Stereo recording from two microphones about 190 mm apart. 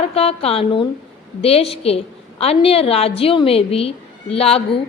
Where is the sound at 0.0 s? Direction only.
30° left (ahead or behind).